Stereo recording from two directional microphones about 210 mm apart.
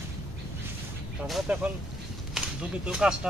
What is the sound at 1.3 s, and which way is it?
Speech, 5° right (ahead or behind).